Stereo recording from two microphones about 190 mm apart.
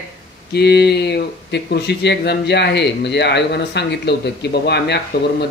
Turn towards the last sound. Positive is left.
turn(degrees=60)  # may be behind; listen again after turning